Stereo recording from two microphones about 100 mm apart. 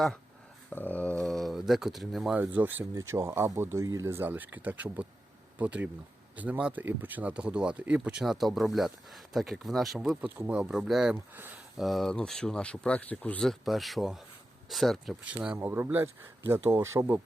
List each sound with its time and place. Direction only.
0.7 s speech: 15° left (ahead or behind)
1.2 s speech: centre (ahead or behind)
2.4 s speech: 20° right (ahead or behind)
2.9 s speech: 30° right (ahead or behind)
10.7 s speech: 5° right (ahead or behind); by 13.5 s 15° left (ahead or behind)
13.5 s speech: centre (ahead or behind)
15.2 s speech: 10° right (ahead or behind)